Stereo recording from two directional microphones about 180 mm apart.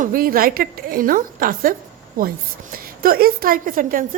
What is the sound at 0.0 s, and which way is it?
A woman's voice, 50° right (ahead or behind).